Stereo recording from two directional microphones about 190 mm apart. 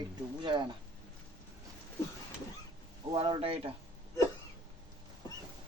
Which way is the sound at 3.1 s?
30° right (ahead or behind).